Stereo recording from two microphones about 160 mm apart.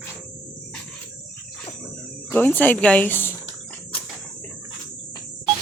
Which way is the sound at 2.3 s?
10° left (ahead or behind).